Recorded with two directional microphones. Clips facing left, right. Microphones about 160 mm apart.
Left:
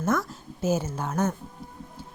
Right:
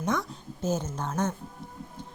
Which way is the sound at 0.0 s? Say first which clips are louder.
Left 3 dB; 5° left (ahead or behind).